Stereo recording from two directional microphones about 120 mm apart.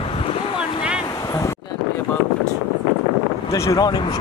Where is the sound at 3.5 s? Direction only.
25° left (ahead or behind).